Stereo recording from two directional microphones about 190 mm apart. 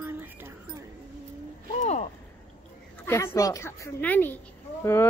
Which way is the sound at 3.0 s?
15° left (ahead or behind).